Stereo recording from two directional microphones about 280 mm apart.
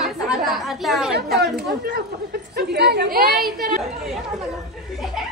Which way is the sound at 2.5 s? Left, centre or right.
Right.